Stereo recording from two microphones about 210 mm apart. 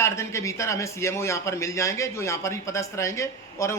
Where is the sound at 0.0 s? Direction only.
15° left (ahead or behind).